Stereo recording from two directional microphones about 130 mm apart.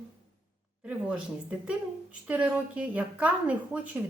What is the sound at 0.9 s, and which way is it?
A woman's voice, 10° right (ahead or behind).